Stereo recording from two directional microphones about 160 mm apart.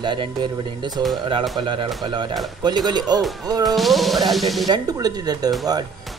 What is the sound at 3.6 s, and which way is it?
Speech, centre (ahead or behind).